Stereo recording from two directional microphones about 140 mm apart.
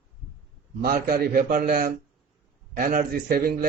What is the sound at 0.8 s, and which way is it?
A man's voice, 90° right.